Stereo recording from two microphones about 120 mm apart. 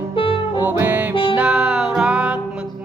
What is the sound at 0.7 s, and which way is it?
Music, 15° right (ahead or behind).